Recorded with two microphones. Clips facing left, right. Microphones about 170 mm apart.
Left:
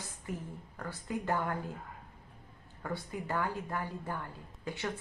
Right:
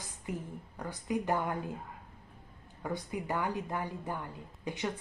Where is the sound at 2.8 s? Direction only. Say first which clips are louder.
Right 2 dB; 15° right (ahead or behind).